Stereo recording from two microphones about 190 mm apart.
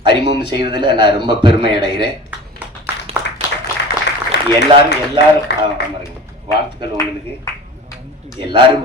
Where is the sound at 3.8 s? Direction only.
65° left (ahead or behind).